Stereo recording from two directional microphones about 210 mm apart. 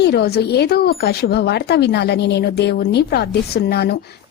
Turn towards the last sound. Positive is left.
turn(degrees=50)  # may be behind; listen again after turning